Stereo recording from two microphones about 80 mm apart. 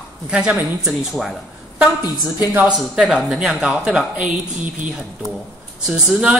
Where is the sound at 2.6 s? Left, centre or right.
Centre.